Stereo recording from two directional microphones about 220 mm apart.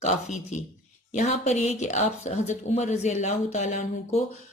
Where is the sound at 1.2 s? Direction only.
30° left (ahead or behind).